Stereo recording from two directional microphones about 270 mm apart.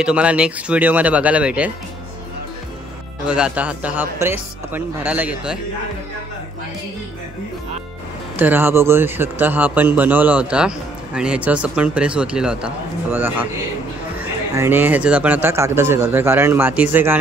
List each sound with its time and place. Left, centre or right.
0.0 s speech: centre
3.3 s speech: centre
8.4 s speech: centre